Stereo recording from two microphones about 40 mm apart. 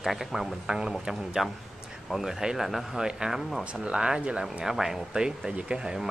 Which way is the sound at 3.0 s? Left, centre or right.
Centre.